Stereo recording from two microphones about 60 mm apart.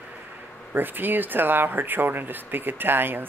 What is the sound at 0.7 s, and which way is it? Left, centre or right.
Speech, right.